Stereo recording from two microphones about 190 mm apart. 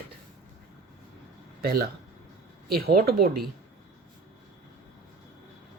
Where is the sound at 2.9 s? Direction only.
55° right (ahead or behind).